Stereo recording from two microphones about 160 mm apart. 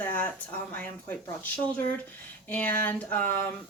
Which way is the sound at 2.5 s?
10° left (ahead or behind).